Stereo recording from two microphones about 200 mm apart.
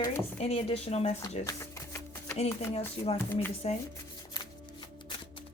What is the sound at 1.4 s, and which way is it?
Typewriter, 15° left (ahead or behind).